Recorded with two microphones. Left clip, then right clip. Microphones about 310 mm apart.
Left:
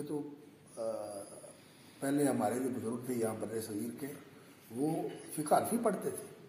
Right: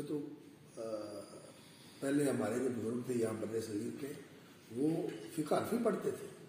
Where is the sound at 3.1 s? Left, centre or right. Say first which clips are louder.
Left 1 dB; left.